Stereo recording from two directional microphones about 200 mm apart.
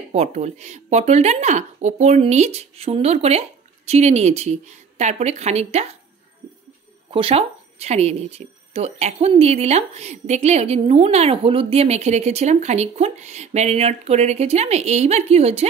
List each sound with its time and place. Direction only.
0.1 s speech: 35° right (ahead or behind)
7.1 s speech: 25° right (ahead or behind)